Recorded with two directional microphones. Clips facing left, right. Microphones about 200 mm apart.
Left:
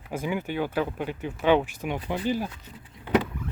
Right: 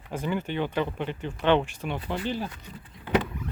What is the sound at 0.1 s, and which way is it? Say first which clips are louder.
Speech: even; 10° left (ahead or behind).